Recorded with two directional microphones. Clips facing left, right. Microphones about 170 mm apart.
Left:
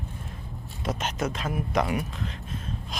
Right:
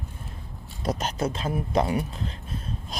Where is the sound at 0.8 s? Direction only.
35° right (ahead or behind).